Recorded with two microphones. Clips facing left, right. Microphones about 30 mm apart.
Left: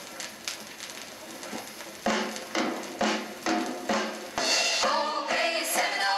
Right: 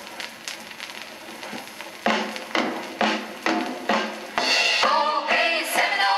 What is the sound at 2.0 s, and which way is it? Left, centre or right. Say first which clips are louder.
Music: right 5 dB; right.